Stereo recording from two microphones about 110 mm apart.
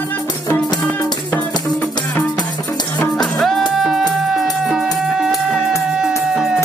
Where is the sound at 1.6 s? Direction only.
10° left (ahead or behind).